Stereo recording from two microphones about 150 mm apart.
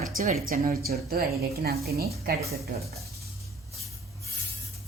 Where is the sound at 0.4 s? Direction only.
70° right (ahead or behind).